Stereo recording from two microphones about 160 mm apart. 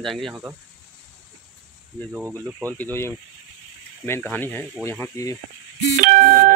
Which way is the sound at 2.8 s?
15° left (ahead or behind).